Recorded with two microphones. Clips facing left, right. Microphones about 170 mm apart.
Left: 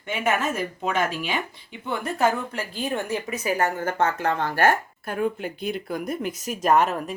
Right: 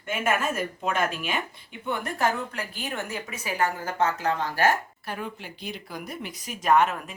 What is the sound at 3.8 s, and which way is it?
Speech, 55° left (ahead or behind).